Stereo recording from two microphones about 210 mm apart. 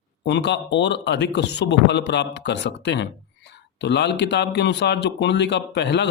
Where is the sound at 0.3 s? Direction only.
55° left (ahead or behind).